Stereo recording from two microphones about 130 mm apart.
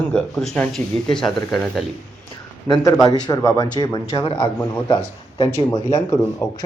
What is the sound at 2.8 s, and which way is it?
Speech, 25° left (ahead or behind).